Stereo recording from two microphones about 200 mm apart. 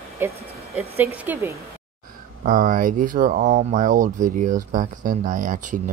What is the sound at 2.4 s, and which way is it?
Speech, 45° right (ahead or behind).